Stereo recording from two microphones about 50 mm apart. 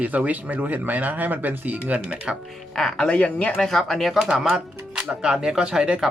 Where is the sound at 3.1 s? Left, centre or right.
Left.